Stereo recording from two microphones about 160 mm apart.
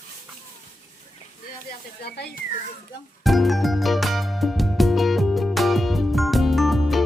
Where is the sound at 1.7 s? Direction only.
90° left.